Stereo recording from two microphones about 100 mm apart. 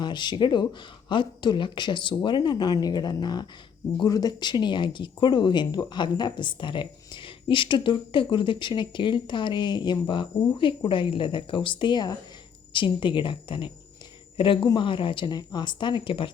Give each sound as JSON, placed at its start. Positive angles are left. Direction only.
{"t": 0.0, "sound": "speech", "side_deg": 50}